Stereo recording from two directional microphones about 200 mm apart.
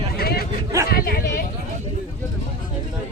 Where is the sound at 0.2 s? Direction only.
50° left (ahead or behind).